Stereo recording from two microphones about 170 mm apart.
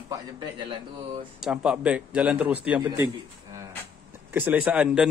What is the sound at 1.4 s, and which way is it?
A man's voice, 5° right (ahead or behind).